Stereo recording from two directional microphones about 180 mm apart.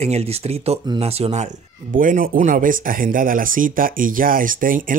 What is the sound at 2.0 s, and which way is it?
Speech, 50° right (ahead or behind).